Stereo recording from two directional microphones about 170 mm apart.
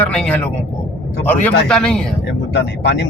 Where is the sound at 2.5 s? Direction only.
90° left.